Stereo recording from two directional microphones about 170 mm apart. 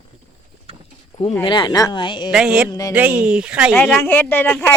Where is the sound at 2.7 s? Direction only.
20° left (ahead or behind).